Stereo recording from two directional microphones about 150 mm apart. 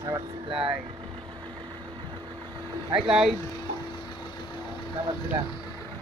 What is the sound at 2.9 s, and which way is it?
Speech, 5° right (ahead or behind).